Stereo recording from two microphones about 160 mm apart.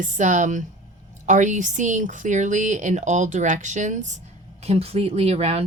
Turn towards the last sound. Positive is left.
turn(degrees=-40)  # may be behind; listen again after turning